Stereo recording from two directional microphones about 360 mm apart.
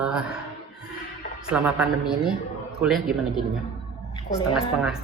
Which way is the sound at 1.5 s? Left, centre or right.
Centre.